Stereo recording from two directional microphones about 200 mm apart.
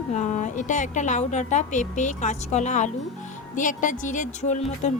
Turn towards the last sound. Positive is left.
turn(degrees=35)  # may be behind; listen again after turning